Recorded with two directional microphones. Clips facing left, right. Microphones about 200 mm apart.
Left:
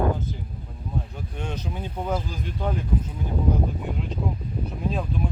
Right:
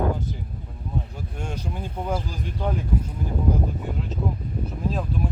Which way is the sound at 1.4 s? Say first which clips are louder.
Even; 10° right (ahead or behind).